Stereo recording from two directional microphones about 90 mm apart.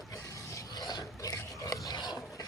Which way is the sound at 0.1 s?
40° left (ahead or behind).